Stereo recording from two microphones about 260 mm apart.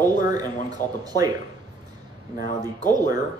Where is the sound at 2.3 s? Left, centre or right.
Left.